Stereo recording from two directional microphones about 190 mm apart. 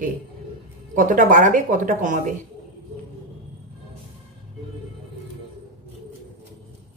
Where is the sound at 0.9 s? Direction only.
45° right (ahead or behind).